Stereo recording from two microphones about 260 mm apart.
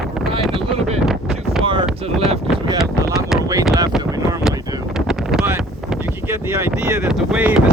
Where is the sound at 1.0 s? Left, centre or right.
Centre.